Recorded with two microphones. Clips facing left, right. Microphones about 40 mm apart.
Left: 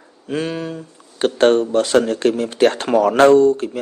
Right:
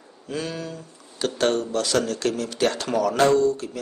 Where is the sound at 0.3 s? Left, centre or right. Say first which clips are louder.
Left 7 dB; left.